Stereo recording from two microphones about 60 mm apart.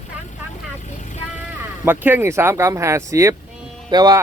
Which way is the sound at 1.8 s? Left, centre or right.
Right.